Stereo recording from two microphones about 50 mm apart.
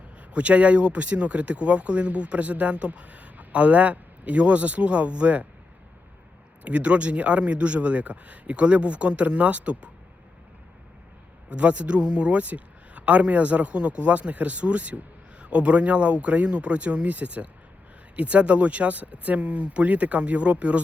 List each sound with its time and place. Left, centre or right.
0.2 s speech: right
6.7 s speech: right
11.4 s speech: right